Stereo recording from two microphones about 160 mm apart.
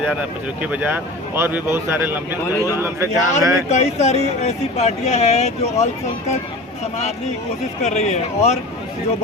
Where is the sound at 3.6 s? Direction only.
45° left (ahead or behind).